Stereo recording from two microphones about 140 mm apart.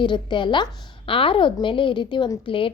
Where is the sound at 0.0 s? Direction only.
35° left (ahead or behind).